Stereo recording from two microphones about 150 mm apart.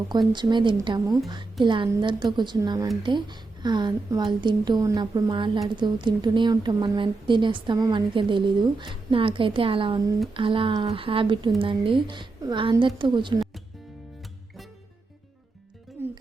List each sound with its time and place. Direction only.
0.3 s a woman's voice: 30° right (ahead or behind)
16.0 s music: 15° right (ahead or behind)